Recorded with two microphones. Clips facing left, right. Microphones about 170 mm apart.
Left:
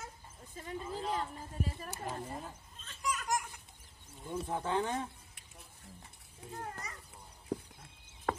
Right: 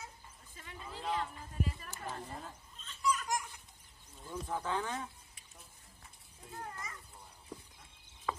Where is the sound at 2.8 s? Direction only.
45° left (ahead or behind).